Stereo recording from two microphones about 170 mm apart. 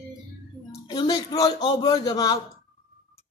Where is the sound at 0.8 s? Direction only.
25° left (ahead or behind).